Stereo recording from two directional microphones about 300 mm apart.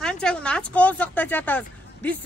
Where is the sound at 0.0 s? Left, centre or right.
Centre.